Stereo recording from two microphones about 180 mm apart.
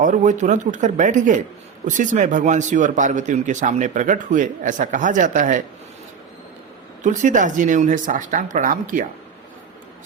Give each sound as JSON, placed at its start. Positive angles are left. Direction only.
{"t": 0.0, "sound": "speech", "side_deg": -45}
{"t": 7.0, "sound": "speech", "side_deg": -45}